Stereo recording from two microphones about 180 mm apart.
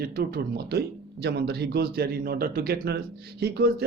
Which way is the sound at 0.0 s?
60° right (ahead or behind).